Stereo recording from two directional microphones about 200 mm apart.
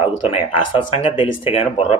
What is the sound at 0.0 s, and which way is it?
Speech, 30° left (ahead or behind).